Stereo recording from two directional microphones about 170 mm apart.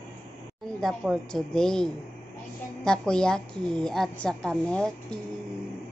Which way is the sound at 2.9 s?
5° left (ahead or behind).